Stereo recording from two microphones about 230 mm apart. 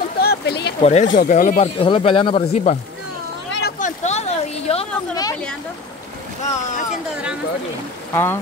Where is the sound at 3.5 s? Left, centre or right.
Left.